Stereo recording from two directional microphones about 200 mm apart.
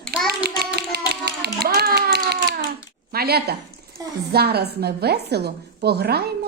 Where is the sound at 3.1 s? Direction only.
50° right (ahead or behind).